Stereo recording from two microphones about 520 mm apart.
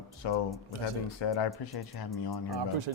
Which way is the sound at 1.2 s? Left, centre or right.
Left.